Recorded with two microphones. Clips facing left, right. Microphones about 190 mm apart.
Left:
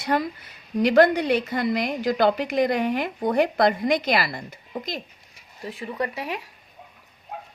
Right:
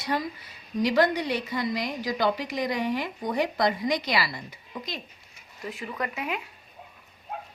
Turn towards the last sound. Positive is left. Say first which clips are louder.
# left 3 dB
turn(degrees=35)  # may be behind; listen again after turning